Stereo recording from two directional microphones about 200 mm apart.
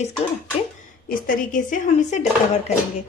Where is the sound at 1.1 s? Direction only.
40° left (ahead or behind).